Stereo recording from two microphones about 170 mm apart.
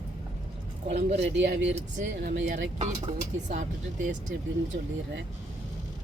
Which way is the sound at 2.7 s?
45° right (ahead or behind).